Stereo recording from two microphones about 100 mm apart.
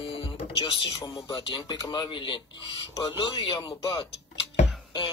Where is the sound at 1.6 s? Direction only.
35° left (ahead or behind).